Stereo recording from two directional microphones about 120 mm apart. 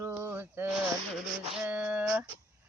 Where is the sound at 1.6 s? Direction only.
10° right (ahead or behind).